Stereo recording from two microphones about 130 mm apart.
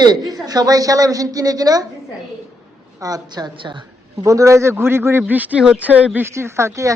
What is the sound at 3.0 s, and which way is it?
A woman's voice, 25° right (ahead or behind).